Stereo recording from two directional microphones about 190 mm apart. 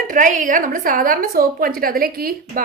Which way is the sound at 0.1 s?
45° right (ahead or behind).